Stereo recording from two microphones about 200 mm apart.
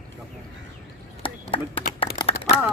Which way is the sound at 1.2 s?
25° left (ahead or behind).